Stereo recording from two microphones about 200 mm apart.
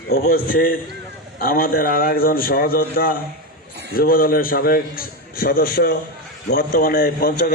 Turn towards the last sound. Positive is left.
turn(degrees=50)  # may be behind; listen again after turning